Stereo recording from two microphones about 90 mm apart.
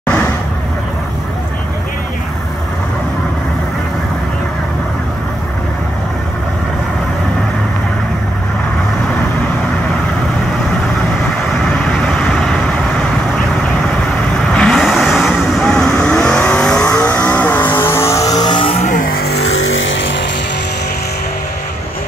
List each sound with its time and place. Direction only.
11.9 s vehicle: 5° left (ahead or behind)
14.5 s vehicle: 10° left (ahead or behind); by 18.5 s 45° left (ahead or behind)
18.5 s music: 90° left